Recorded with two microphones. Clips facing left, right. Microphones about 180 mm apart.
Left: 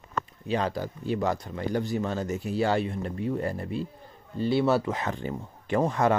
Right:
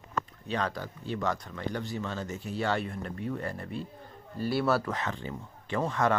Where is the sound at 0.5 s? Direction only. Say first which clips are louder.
Left 6 dB; 30° left (ahead or behind).